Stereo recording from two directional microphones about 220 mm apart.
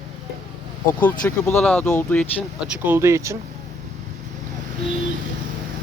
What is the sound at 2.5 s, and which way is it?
Speech, 5° right (ahead or behind).